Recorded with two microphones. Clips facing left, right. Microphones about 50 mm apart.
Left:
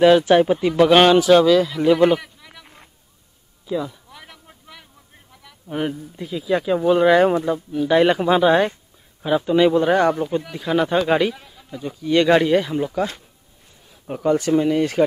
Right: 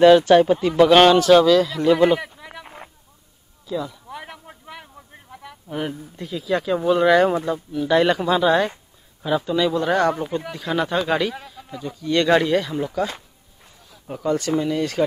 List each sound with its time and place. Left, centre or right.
0.0 s speech: centre
2.2 s a sound: right
3.6 s speech: centre
4.1 s a sound: right
5.7 s speech: centre
9.8 s speech: centre
11.4 s a sound: centre
11.9 s speech: centre
14.0 s speech: centre